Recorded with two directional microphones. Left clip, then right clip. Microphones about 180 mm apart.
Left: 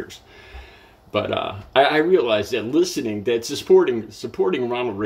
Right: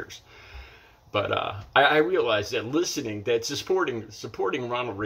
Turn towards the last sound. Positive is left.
turn(degrees=15)  # may be behind; listen again after turning